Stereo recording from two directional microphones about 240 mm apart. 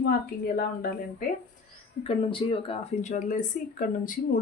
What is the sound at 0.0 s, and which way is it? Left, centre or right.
Speech, left.